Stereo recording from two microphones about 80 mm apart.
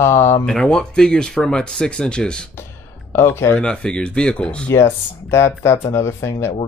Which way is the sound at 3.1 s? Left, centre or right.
Left.